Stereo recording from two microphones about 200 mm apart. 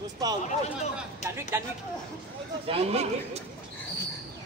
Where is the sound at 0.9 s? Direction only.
15° right (ahead or behind).